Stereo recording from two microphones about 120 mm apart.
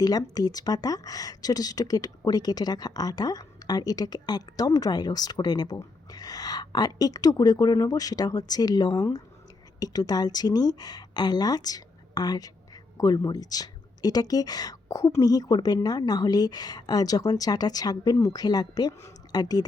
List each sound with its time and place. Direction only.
0.0 s speech: 35° left (ahead or behind)